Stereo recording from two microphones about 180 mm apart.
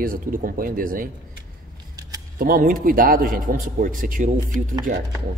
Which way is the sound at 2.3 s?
50° right (ahead or behind).